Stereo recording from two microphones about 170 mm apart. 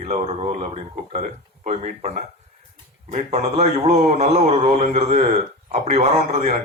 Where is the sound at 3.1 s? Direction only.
40° right (ahead or behind).